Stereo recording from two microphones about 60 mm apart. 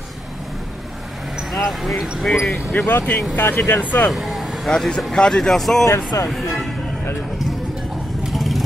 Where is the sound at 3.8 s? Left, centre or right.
Left.